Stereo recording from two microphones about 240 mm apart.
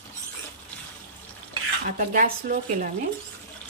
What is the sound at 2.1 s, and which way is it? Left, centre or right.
Speech, right.